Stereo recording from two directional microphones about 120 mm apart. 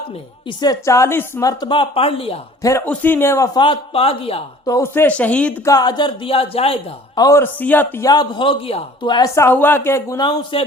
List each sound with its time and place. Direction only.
0.4 s a woman's voice: 35° left (ahead or behind)
1.6 s speech: 45° left (ahead or behind)
2.6 s speech: 25° left (ahead or behind)
2.8 s a woman's voice: 15° left (ahead or behind)
3.6 s speech: 50° left (ahead or behind)
4.6 s speech: 25° left (ahead or behind)
5.6 s speech: 35° left (ahead or behind); by 6.7 s 55° left (ahead or behind)
7.2 s a woman's voice: 25° left (ahead or behind)
7.4 s speech: 15° left (ahead or behind)
8.0 s a man's voice: 35° left (ahead or behind)
9.0 s a man's voice: 40° left (ahead or behind)
9.3 s a woman's voice: 20° left (ahead or behind)
10.2 s speech: 45° left (ahead or behind)